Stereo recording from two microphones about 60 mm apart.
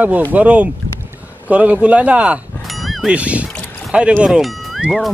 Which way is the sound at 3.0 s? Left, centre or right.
Right.